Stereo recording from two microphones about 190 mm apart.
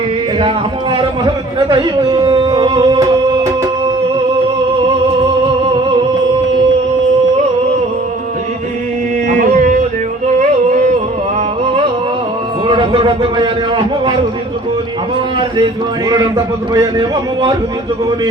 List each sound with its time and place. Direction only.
0.3 s a man's voice: 25° right (ahead or behind)
9.4 s music: 45° right (ahead or behind)
11.3 s music: 30° right (ahead or behind)
12.6 s a sound: 25° right (ahead or behind)
16.7 s speech: 20° right (ahead or behind)